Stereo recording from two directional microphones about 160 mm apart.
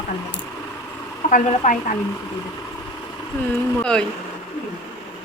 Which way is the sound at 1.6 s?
50° left (ahead or behind).